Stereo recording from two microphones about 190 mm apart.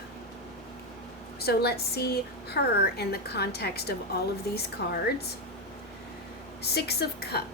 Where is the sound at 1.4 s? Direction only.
55° left (ahead or behind).